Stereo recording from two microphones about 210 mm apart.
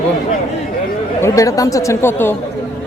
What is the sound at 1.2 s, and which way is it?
A man's voice, 15° left (ahead or behind).